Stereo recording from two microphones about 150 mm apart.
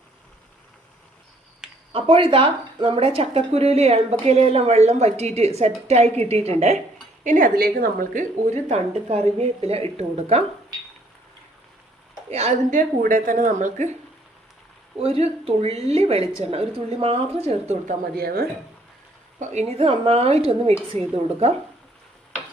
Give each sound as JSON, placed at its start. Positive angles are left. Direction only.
{"t": 1.9, "sound": "speech", "side_deg": -35}
{"t": 7.3, "sound": "a woman's voice", "side_deg": -65}
{"t": 8.7, "sound": "speech", "side_deg": -45}
{"t": 12.3, "sound": "speech", "side_deg": -45}
{"t": 13.0, "sound": "a woman's voice", "side_deg": -65}
{"t": 14.9, "sound": "speech", "side_deg": -40}
{"t": 18.2, "sound": "a woman's voice", "side_deg": -90}
{"t": 19.4, "sound": "speech", "side_deg": -45}